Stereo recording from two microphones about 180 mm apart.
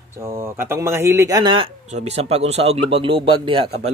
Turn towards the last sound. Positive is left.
turn(degrees=-30)  # may be behind; listen again after turning